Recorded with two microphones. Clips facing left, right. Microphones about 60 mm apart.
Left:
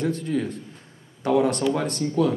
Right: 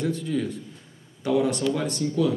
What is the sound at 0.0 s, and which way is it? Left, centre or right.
A man's voice, left.